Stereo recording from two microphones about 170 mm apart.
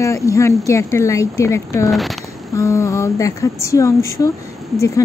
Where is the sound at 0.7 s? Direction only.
15° left (ahead or behind).